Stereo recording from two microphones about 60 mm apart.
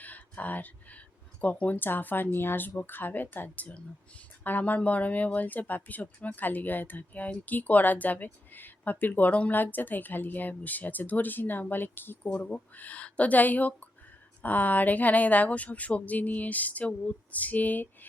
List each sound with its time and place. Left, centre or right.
0.0 s speech: left
12.3 s speech: left